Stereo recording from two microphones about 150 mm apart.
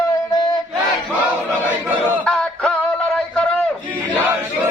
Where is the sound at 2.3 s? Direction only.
5° left (ahead or behind).